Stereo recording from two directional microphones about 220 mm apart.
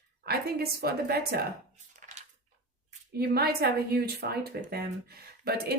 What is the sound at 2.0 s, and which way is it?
Dog, 35° right (ahead or behind).